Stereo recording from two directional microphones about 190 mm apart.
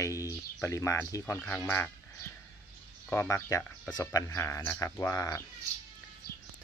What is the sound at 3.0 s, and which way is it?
Speech, 15° left (ahead or behind).